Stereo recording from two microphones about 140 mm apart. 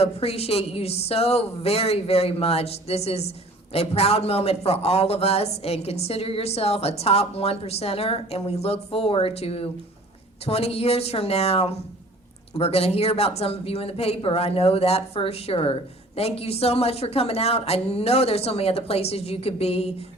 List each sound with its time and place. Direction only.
0.0 s a woman's voice: 45° left (ahead or behind)